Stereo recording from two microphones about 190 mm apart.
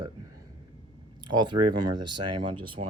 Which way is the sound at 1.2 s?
25° right (ahead or behind).